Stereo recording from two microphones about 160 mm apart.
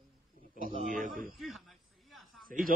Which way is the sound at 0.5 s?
55° right (ahead or behind).